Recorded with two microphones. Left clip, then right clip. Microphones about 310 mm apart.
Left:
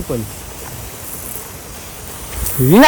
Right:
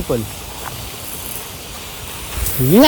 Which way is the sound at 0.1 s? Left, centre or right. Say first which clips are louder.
Right 3 dB; centre.